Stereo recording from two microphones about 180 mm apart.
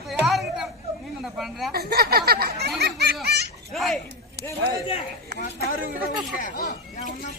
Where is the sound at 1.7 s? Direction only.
60° right (ahead or behind).